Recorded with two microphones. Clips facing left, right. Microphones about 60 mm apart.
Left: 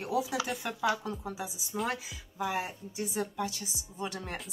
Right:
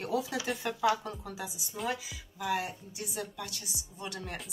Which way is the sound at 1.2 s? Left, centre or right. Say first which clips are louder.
Left 2 dB; left.